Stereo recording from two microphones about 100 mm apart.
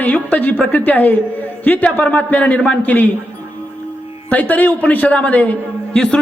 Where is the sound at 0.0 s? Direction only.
15° left (ahead or behind).